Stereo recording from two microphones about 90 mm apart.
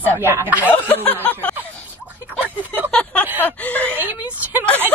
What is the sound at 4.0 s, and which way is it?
Speech, 20° right (ahead or behind).